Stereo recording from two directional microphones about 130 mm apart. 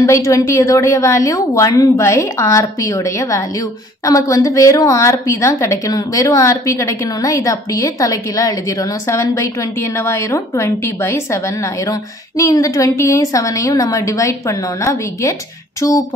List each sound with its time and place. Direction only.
0.0 s a woman's voice: 25° left (ahead or behind)